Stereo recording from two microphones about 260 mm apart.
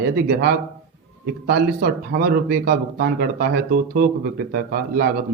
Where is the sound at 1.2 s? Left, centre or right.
Right.